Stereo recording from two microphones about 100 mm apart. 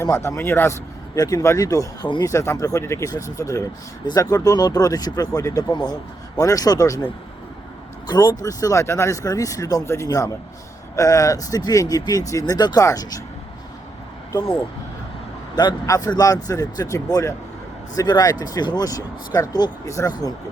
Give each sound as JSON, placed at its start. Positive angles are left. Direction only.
{"t": 0.0, "sound": "speech", "side_deg": 30}
{"t": 1.1, "sound": "speech", "side_deg": 35}
{"t": 5.7, "sound": "a man's voice", "side_deg": 45}
{"t": 8.0, "sound": "speech", "side_deg": 45}
{"t": 15.5, "sound": "speech", "side_deg": 40}